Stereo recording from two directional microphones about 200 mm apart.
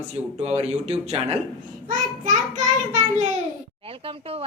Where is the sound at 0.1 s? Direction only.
35° right (ahead or behind).